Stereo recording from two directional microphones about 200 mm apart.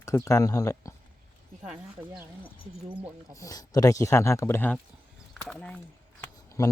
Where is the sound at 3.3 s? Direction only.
15° left (ahead or behind).